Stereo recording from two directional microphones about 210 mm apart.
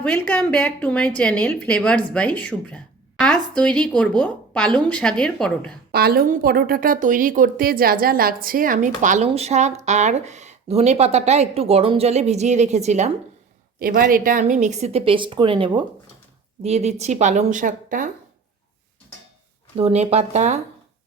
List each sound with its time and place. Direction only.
0.0 s a woman's voice: 5° left (ahead or behind)
5.9 s a woman's voice: 45° right (ahead or behind)
13.7 s a woman's voice: 45° right (ahead or behind)
19.7 s a woman's voice: 30° right (ahead or behind)